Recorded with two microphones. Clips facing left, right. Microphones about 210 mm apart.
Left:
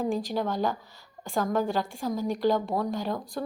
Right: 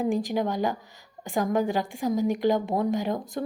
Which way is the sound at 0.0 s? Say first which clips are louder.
Right 3 dB; 15° right (ahead or behind).